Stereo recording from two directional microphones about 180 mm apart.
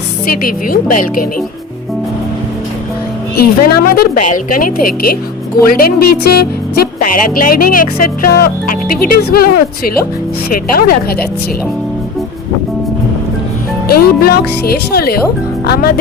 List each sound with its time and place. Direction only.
0.3 s speech: 50° left (ahead or behind)
3.3 s a woman's voice: 60° left (ahead or behind)
4.2 s a woman's voice: 45° left (ahead or behind)
13.9 s a woman's voice: 60° left (ahead or behind)